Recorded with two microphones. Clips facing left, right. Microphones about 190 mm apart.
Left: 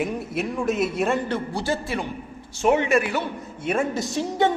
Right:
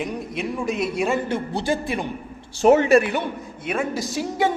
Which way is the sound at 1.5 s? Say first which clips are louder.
Right 2 dB; 15° right (ahead or behind).